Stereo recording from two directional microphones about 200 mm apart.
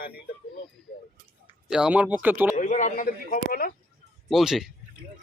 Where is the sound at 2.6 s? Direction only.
40° left (ahead or behind).